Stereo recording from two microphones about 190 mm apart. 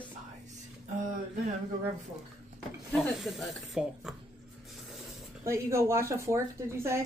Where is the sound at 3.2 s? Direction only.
Centre (ahead or behind).